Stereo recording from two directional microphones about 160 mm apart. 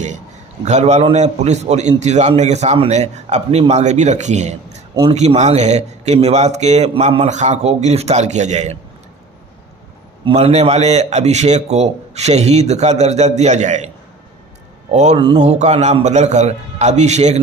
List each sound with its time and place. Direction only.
0.6 s a man's voice: 45° right (ahead or behind)
10.2 s a man's voice: 40° right (ahead or behind)